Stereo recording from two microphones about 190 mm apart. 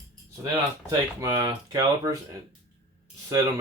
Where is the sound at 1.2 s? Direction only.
20° right (ahead or behind).